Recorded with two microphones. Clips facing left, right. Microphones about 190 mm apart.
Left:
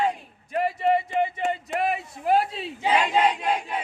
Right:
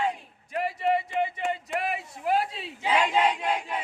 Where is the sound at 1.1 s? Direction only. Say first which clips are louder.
Left 3 dB; 45° left (ahead or behind).